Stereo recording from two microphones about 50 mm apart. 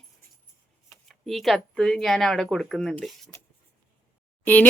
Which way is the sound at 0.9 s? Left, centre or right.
Centre.